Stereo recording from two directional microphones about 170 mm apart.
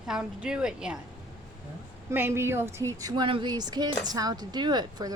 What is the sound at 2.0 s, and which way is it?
Speech, 15° right (ahead or behind).